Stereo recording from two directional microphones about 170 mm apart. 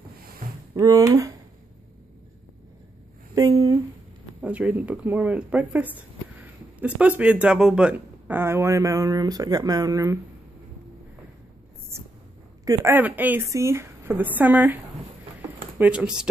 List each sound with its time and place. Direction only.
0.7 s speech: 20° right (ahead or behind)
3.3 s speech: 20° right (ahead or behind)
4.4 s speech: 5° right (ahead or behind)
12.6 s speech: 15° right (ahead or behind)
15.8 s speech: 5° right (ahead or behind)